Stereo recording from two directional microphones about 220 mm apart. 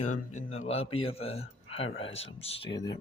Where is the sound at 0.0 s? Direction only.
35° left (ahead or behind).